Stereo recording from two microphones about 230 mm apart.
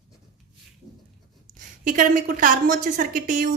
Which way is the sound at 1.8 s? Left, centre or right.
Right.